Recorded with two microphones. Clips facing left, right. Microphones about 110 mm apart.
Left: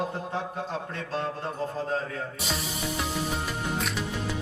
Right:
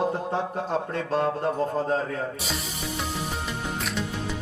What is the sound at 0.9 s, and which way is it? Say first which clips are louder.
A man's voice: right 6 dB; 50° right (ahead or behind).